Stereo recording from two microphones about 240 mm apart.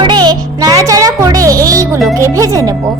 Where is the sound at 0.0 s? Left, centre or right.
Centre.